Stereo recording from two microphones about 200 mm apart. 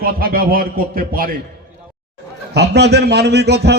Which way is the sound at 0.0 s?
45° right (ahead or behind).